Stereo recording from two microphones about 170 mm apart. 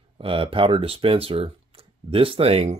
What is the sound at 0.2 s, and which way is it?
Speech, 30° right (ahead or behind).